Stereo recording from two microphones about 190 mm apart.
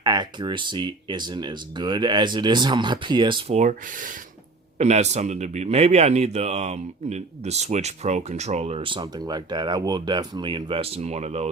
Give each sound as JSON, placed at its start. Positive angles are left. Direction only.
{"t": 0.0, "sound": "speech", "side_deg": -20}